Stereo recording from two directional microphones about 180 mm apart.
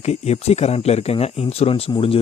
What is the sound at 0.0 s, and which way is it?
Speech, 35° left (ahead or behind).